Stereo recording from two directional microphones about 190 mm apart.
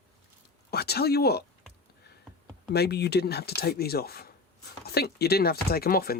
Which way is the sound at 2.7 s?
60° left (ahead or behind).